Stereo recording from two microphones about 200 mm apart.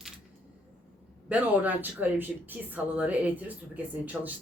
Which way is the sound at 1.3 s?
10° right (ahead or behind).